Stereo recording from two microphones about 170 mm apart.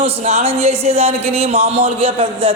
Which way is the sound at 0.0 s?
35° right (ahead or behind).